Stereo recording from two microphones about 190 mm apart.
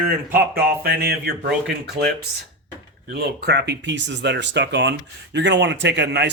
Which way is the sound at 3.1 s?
60° right (ahead or behind).